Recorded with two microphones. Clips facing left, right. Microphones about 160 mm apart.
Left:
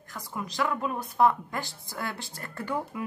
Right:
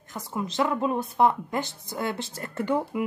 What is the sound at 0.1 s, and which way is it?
A woman's voice, 25° right (ahead or behind).